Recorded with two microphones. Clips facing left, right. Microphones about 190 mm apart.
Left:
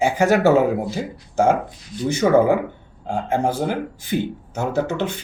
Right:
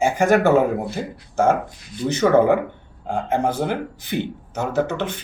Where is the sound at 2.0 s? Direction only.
10° left (ahead or behind).